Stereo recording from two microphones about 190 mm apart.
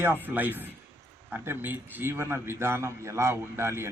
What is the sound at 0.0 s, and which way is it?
A man's voice, 10° right (ahead or behind).